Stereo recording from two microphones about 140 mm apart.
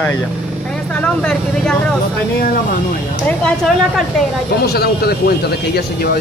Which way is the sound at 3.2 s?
5° left (ahead or behind).